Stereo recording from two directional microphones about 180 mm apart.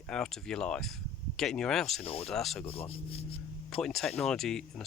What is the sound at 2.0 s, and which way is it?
Speech, 35° left (ahead or behind).